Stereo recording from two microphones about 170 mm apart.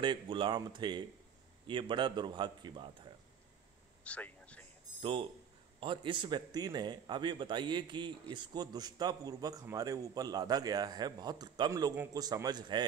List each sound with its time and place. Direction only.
0.0 s a man's voice: 30° right (ahead or behind)
4.0 s a sound: 5° left (ahead or behind)
5.8 s a man's voice: 30° right (ahead or behind)